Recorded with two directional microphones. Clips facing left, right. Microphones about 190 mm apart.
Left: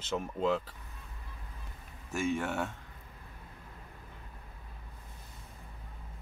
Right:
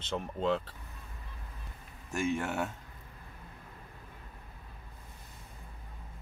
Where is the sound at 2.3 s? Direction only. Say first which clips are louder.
Even; centre (ahead or behind).